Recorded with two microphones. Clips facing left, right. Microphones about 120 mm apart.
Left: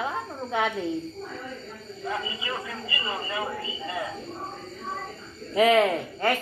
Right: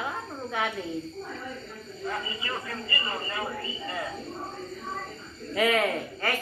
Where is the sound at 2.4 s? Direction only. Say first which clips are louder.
Left 1 dB; 15° left (ahead or behind).